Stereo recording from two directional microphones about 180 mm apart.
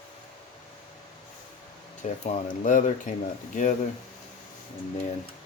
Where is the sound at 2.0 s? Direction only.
40° left (ahead or behind).